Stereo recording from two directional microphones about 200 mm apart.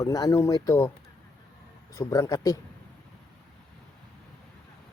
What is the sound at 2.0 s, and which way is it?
Speech, 15° left (ahead or behind).